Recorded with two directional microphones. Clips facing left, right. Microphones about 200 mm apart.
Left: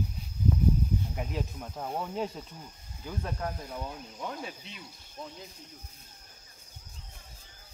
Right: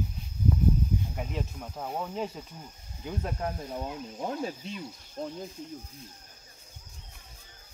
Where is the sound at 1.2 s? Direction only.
Centre (ahead or behind).